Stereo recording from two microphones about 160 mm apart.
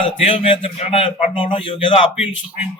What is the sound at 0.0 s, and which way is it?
A man's voice, 35° left (ahead or behind).